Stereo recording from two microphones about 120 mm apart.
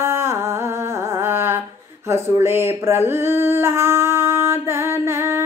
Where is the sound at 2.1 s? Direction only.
20° right (ahead or behind).